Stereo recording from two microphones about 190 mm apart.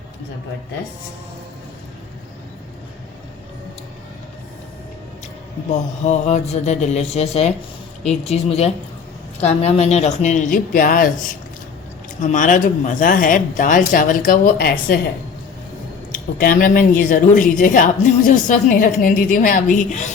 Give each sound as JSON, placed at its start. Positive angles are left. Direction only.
{"t": 5.7, "sound": "speech", "side_deg": 40}
{"t": 12.2, "sound": "speech", "side_deg": 40}
{"t": 16.4, "sound": "speech", "side_deg": 50}